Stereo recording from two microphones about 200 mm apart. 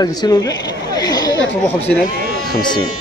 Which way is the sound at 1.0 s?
20° left (ahead or behind).